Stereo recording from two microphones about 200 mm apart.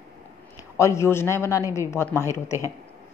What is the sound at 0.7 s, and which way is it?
A woman's voice, 15° left (ahead or behind).